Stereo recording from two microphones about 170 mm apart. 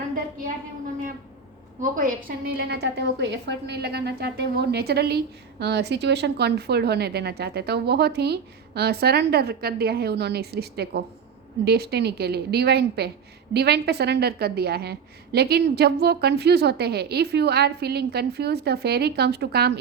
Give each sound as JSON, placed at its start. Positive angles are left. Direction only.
{"t": 1.8, "sound": "a woman's voice", "side_deg": -50}